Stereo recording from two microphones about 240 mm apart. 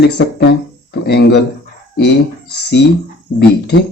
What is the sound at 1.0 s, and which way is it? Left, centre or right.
Speech, left.